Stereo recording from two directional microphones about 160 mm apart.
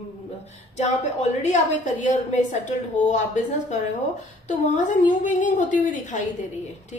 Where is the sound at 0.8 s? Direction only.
45° left (ahead or behind).